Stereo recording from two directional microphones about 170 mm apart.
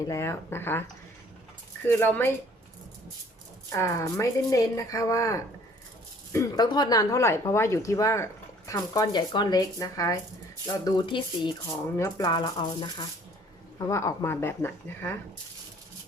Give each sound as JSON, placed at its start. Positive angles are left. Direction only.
{"t": 0.1, "sound": "speech", "side_deg": 15}
{"t": 1.9, "sound": "speech", "side_deg": 10}
{"t": 3.7, "sound": "speech", "side_deg": 15}